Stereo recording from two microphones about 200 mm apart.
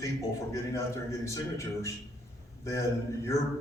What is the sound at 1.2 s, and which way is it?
A man's voice, 15° left (ahead or behind).